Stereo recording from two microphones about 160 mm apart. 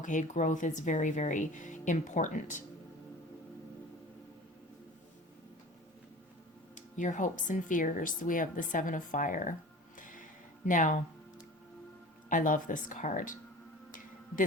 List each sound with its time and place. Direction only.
0.0 s speech: 50° left (ahead or behind)
6.7 s speech: 50° left (ahead or behind)
10.0 s music: 55° left (ahead or behind)
10.7 s speech: 55° left (ahead or behind)
12.3 s speech: 55° left (ahead or behind)